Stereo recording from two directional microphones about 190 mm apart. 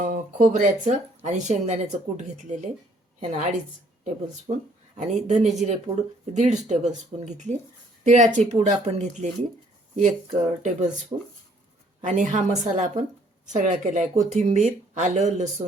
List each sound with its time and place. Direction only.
0.0 s speech: 45° right (ahead or behind)
4.9 s speech: 40° right (ahead or behind)
12.0 s speech: 40° right (ahead or behind)